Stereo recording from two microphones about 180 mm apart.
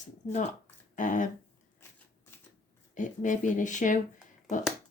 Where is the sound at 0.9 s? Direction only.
45° left (ahead or behind).